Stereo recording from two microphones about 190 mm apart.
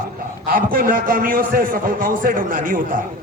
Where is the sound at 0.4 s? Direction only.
50° right (ahead or behind).